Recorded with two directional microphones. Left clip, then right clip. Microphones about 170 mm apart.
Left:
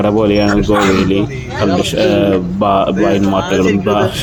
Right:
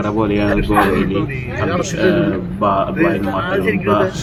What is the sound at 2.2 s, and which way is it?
Speech, 40° left (ahead or behind).